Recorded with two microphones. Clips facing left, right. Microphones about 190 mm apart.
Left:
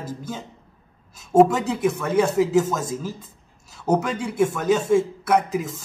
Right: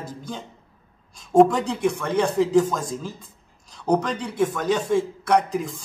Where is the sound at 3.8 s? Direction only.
5° left (ahead or behind).